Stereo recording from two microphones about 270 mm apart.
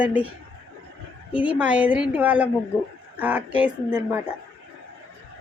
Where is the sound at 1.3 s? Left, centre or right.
Centre.